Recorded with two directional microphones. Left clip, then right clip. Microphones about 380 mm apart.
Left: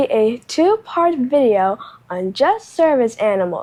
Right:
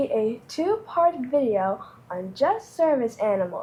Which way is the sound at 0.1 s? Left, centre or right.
Left.